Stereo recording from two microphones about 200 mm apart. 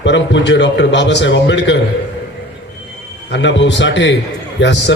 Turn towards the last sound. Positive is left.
turn(degrees=60)  # may be behind; listen again after turning